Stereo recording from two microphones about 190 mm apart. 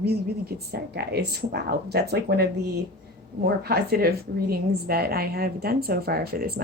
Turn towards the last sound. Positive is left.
turn(degrees=-55)  # may be behind; listen again after turning